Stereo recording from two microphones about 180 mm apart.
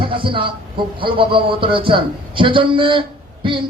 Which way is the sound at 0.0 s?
30° right (ahead or behind).